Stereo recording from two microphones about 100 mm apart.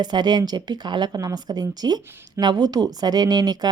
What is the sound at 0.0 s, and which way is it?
A woman's voice, 50° right (ahead or behind).